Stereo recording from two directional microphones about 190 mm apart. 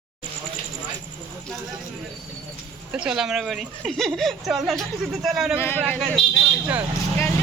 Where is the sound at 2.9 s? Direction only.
5° right (ahead or behind).